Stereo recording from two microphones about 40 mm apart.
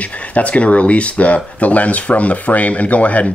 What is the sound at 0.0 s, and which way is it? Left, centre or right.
Speech, left.